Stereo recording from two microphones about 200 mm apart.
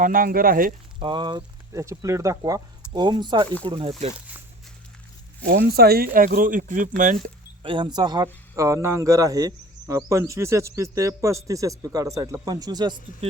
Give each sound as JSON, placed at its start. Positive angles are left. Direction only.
{"t": 0.0, "sound": "speech", "side_deg": -45}
{"t": 0.9, "sound": "speech", "side_deg": -25}
{"t": 5.5, "sound": "speech", "side_deg": -50}
{"t": 7.6, "sound": "speech", "side_deg": -25}